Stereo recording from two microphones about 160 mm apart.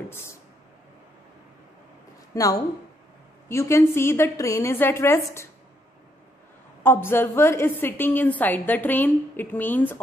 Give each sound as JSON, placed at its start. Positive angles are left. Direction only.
{"t": 0.1, "sound": "speech", "side_deg": 15}
{"t": 2.3, "sound": "a woman's voice", "side_deg": 20}
{"t": 6.8, "sound": "a woman's voice", "side_deg": 15}